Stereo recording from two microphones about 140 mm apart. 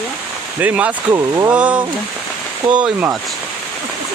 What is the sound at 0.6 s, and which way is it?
Speech, 10° right (ahead or behind).